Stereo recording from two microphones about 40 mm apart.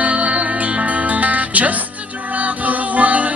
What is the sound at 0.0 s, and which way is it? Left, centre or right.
Music, right.